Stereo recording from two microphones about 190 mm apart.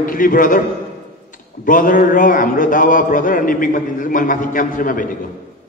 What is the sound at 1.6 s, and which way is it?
A man's voice, 45° left (ahead or behind).